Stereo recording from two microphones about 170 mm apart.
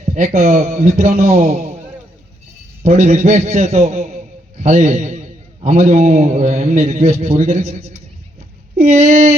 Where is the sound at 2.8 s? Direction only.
45° right (ahead or behind).